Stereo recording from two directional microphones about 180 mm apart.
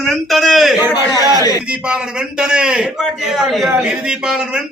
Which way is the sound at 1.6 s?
5° right (ahead or behind).